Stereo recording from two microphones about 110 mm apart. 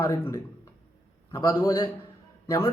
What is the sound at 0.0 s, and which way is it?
Speech, 25° left (ahead or behind).